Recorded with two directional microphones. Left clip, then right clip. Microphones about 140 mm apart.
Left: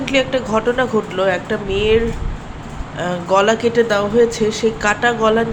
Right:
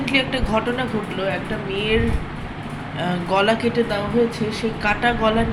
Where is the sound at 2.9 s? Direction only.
20° left (ahead or behind).